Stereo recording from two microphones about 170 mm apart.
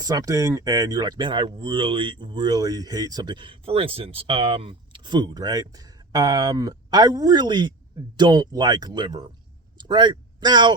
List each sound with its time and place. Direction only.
0.0 s speech: 20° right (ahead or behind)